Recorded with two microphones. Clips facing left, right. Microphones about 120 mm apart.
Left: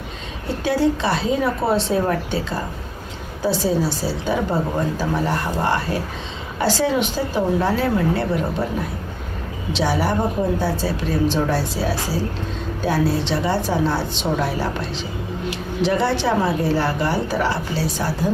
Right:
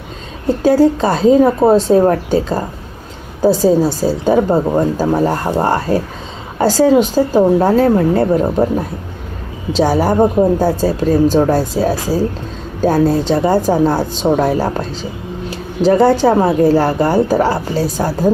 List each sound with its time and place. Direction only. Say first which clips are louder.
0.6 s a woman's voice: right 8 dB; 45° right (ahead or behind)
9.7 s a woman's voice: right 8 dB; 45° right (ahead or behind)